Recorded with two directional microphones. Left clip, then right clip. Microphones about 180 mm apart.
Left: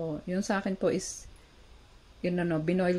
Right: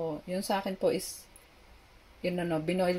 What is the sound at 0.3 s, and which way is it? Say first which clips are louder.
Speech: left 1 dB; centre (ahead or behind).